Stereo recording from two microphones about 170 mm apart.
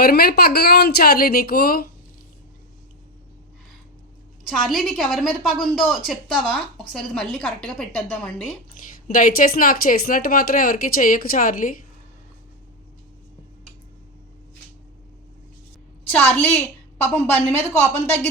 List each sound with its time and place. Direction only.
0.0 s speech: 65° left (ahead or behind)
4.4 s a woman's voice: centre (ahead or behind)
8.8 s a sound: 55° left (ahead or behind)
9.1 s speech: 55° left (ahead or behind)
16.0 s a woman's voice: 10° left (ahead or behind)